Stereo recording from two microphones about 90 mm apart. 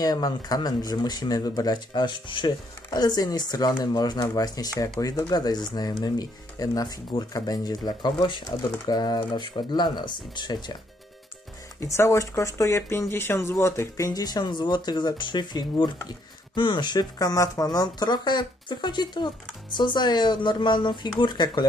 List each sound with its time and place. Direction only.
0.0 s speech: 45° left (ahead or behind)
11.8 s speech: 30° left (ahead or behind); by 21.6 s 60° left (ahead or behind)